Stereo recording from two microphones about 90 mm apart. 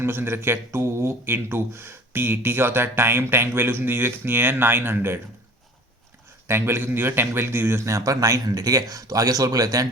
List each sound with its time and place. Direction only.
0.0 s speech: 25° right (ahead or behind)
6.5 s speech: 25° right (ahead or behind); by 9.8 s 45° right (ahead or behind)